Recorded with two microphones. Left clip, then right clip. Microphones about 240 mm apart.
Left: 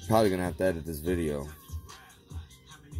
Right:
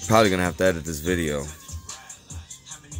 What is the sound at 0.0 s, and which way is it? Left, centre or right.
Speech, centre.